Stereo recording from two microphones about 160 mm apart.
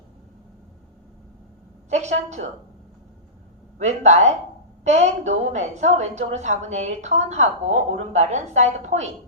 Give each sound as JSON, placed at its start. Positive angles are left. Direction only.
{"t": 1.9, "sound": "a woman's voice", "side_deg": -45}
{"t": 3.8, "sound": "a woman's voice", "side_deg": -45}